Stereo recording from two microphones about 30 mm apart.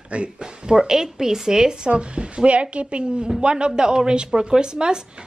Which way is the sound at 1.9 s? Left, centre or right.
Right.